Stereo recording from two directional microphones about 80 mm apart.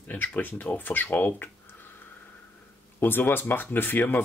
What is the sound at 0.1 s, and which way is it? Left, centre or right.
Speech, left.